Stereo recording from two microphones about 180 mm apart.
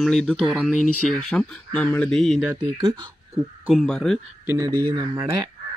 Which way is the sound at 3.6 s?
Centre (ahead or behind).